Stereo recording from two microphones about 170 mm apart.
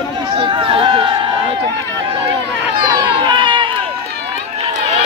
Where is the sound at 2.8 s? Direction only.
25° right (ahead or behind).